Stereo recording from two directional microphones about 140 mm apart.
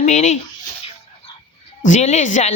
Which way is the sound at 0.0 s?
55° left (ahead or behind).